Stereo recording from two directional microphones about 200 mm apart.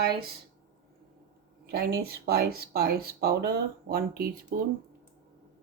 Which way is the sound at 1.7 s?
50° right (ahead or behind).